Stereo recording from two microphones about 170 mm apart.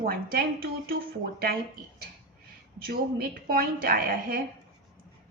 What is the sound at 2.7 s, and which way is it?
Speech, 60° right (ahead or behind).